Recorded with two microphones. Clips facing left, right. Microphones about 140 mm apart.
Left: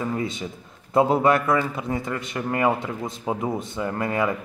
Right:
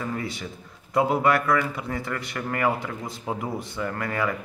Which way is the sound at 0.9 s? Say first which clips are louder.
Left 3 dB; 25° left (ahead or behind).